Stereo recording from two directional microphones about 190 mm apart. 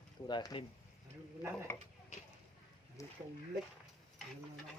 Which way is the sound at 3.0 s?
15° left (ahead or behind).